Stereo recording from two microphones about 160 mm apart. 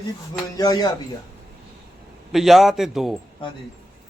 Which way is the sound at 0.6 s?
25° left (ahead or behind).